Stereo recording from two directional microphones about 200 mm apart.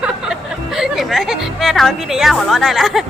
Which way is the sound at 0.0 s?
Centre (ahead or behind).